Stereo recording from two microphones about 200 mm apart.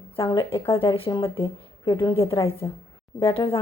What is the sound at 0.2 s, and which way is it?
A woman's voice, 25° left (ahead or behind).